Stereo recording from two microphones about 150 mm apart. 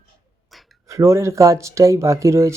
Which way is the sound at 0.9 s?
20° right (ahead or behind).